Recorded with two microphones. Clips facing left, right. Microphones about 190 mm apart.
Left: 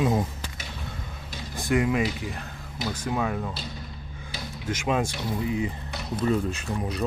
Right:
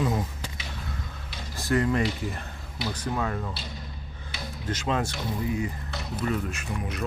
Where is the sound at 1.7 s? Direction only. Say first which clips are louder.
Left 1 dB; 10° left (ahead or behind).